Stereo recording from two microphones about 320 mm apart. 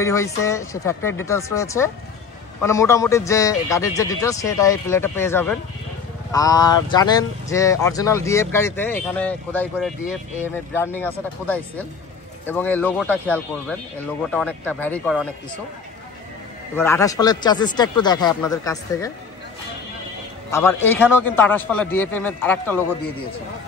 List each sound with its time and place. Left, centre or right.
0.0 s speech: centre
16.7 s speech: centre
20.5 s speech: centre